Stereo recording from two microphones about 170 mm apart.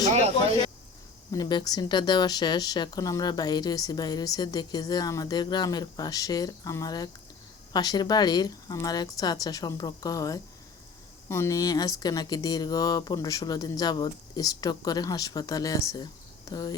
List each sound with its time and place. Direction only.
1.3 s speech: 25° left (ahead or behind)